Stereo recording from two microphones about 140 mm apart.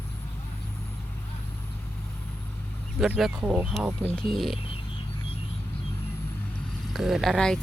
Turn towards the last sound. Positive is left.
turn(degrees=0)  # may be behind; listen again after turning